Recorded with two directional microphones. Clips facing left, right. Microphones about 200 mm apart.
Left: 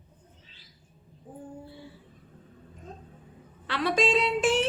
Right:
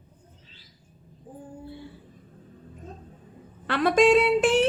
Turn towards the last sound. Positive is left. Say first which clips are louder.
# right 5 dB
turn(degrees=-60)  # may be behind; listen again after turning